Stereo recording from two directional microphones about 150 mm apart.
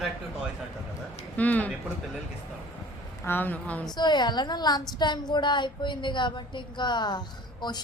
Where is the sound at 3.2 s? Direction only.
15° left (ahead or behind).